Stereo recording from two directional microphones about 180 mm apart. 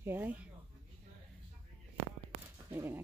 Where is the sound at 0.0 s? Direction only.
10° right (ahead or behind).